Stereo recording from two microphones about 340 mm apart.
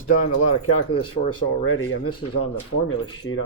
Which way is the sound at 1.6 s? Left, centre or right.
Left.